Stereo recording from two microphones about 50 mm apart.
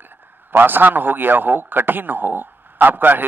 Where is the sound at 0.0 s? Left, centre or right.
Right.